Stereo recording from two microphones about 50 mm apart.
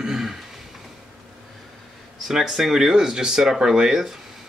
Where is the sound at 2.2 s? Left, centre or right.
Centre.